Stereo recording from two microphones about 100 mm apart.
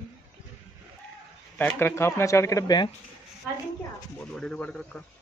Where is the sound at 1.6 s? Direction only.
25° left (ahead or behind).